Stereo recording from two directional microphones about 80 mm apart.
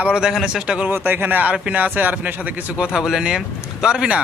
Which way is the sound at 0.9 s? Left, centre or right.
Right.